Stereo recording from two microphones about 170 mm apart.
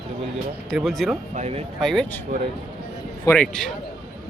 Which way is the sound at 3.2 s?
10° left (ahead or behind).